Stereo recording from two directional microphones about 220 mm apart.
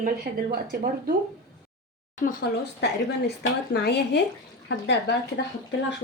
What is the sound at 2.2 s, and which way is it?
Speech, 45° left (ahead or behind).